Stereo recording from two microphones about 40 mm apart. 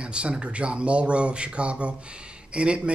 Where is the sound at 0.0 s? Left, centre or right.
Right.